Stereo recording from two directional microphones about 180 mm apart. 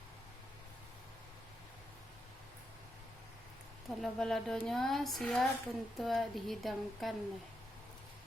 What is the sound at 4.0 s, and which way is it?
Speech, 5° left (ahead or behind).